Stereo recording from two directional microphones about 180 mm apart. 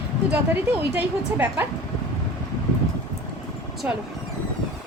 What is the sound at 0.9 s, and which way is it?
Speech, 10° right (ahead or behind).